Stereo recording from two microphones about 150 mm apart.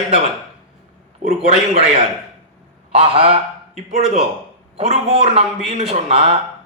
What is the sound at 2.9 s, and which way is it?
Speech, 40° right (ahead or behind).